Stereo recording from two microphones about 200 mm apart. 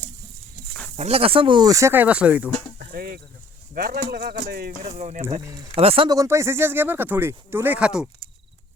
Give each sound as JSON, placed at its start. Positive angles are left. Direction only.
{"t": 0.9, "sound": "speech", "side_deg": -30}
{"t": 2.9, "sound": "speech", "side_deg": -45}
{"t": 4.9, "sound": "speech", "side_deg": -35}
{"t": 5.5, "sound": "speech", "side_deg": -20}